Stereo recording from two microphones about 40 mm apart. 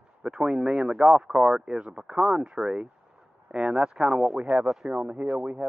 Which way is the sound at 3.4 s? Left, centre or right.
Centre.